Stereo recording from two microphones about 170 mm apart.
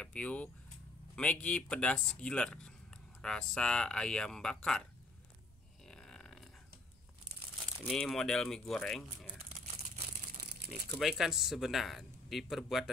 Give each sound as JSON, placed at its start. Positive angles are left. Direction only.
{"t": 0.0, "sound": "a man's voice", "side_deg": 5}
{"t": 5.9, "sound": "a sound", "side_deg": 5}
{"t": 7.8, "sound": "a man's voice", "side_deg": 0}
{"t": 11.0, "sound": "a man's voice", "side_deg": 0}